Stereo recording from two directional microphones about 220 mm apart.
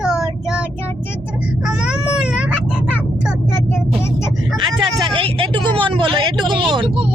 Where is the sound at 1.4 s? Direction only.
5° right (ahead or behind).